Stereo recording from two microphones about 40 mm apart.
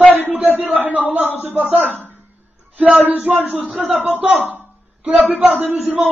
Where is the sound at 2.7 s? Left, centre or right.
Right.